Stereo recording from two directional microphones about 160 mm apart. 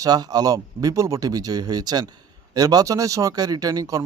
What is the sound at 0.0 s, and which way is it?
Speech, 25° right (ahead or behind).